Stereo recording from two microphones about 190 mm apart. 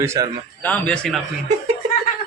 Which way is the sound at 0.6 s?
5° left (ahead or behind).